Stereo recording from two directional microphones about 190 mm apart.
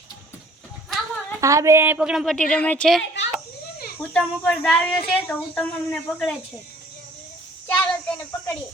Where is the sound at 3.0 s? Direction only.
70° left (ahead or behind).